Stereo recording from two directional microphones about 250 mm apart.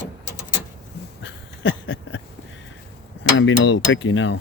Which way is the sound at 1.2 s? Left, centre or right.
Left.